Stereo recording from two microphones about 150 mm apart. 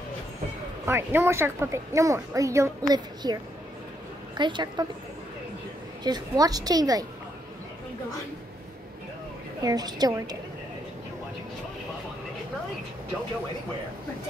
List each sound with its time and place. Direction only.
0.8 s speech: 15° right (ahead or behind)
4.4 s a woman's voice: 30° right (ahead or behind)
6.0 s speech: 25° right (ahead or behind)
9.6 s speech: 25° right (ahead or behind)